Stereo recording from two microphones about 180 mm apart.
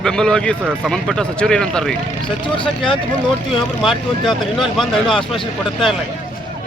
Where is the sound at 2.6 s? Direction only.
30° left (ahead or behind).